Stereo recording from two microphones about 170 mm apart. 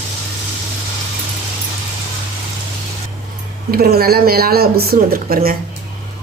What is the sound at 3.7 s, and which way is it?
Speech, 65° right (ahead or behind).